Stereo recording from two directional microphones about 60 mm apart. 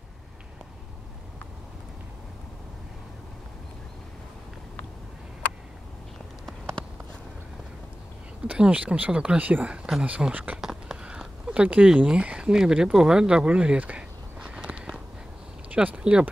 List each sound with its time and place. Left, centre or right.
8.5 s speech: right
10.6 s speech: centre
14.6 s a sound: right
15.7 s speech: right